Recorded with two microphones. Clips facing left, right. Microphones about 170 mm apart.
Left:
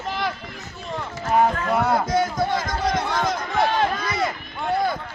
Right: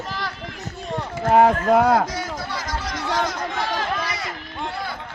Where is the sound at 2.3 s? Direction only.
50° left (ahead or behind).